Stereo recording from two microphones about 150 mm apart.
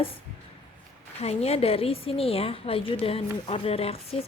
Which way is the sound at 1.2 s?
45° left (ahead or behind).